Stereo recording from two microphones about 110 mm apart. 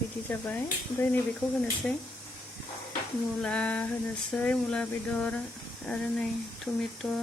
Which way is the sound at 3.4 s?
10° left (ahead or behind).